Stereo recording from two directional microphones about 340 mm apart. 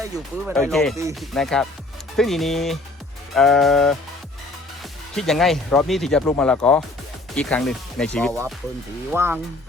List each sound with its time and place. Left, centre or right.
0.0 s speech: centre
5.1 s speech: centre